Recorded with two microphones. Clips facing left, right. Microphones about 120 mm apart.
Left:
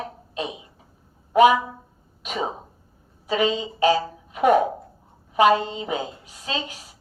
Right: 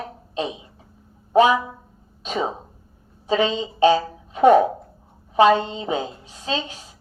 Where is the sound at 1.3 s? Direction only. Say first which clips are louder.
Left 1 dB; 30° right (ahead or behind).